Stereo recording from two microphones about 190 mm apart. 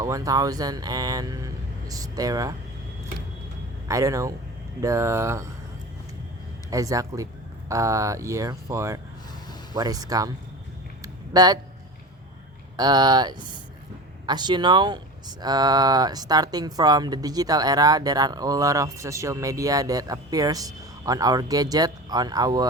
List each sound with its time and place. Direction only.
0.0 s speech: 20° right (ahead or behind)
3.8 s speech: 15° right (ahead or behind)
6.7 s speech: 20° right (ahead or behind)
11.0 s a sound: 20° right (ahead or behind)
12.7 s speech: 20° right (ahead or behind)